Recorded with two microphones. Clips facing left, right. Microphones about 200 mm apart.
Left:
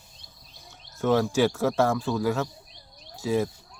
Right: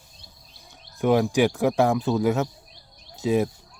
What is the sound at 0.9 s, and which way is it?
Speech, 15° right (ahead or behind).